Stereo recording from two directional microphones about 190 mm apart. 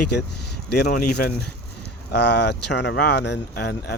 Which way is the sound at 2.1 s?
60° left (ahead or behind).